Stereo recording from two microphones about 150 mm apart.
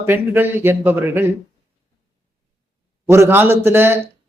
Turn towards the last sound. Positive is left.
turn(degrees=-15)  # may be behind; listen again after turning